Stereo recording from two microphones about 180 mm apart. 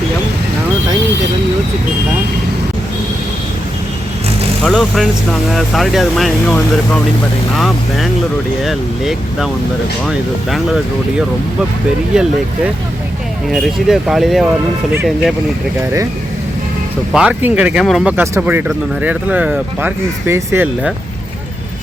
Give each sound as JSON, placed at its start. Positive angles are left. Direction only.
{"t": 4.6, "sound": "speech", "side_deg": 0}
{"t": 13.5, "sound": "speech", "side_deg": 0}
{"t": 17.1, "sound": "speech", "side_deg": -5}